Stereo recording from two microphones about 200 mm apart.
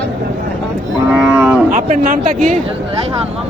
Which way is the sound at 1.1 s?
10° right (ahead or behind).